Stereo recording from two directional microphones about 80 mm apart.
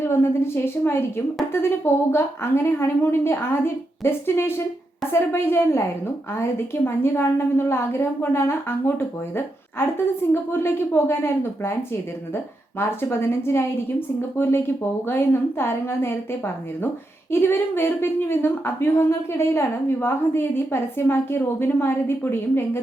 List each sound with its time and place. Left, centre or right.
0.0 s a woman's voice: left
13.0 s a woman's voice: left
17.3 s a woman's voice: left